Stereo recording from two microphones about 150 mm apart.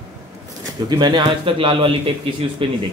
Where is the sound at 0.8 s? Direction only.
30° right (ahead or behind).